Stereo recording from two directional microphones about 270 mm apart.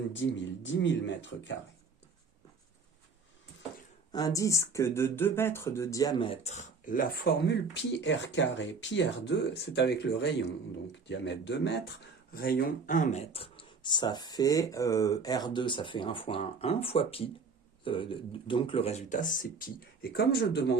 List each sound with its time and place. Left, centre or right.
0.1 s speech: left
4.1 s speech: centre; by 20.7 s left